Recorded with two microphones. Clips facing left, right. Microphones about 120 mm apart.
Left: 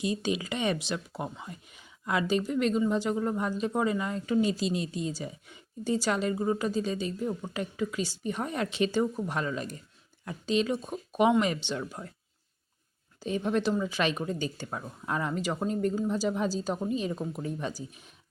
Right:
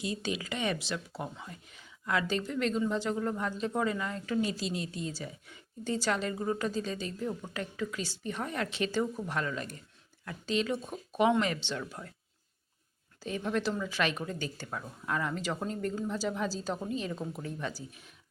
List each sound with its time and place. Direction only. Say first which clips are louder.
0.0 s speech: left 5 dB; 20° left (ahead or behind)
13.1 s speech: left 4 dB; 20° left (ahead or behind)